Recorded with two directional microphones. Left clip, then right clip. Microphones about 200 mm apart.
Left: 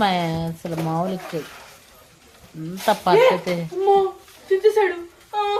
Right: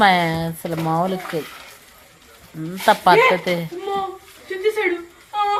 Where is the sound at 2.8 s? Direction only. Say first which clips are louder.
Right 2 dB; 15° right (ahead or behind).